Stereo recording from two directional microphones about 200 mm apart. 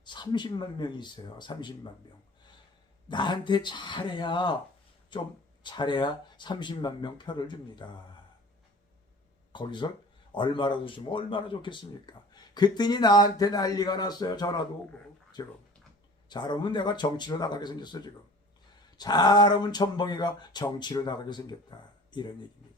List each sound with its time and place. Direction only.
0.0 s speech: 20° left (ahead or behind)
3.1 s speech: 25° left (ahead or behind)
9.5 s speech: 25° left (ahead or behind)